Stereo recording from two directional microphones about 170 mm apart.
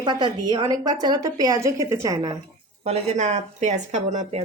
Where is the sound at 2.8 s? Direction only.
40° right (ahead or behind).